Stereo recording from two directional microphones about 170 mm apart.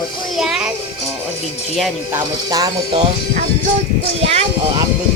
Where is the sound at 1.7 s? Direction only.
5° right (ahead or behind).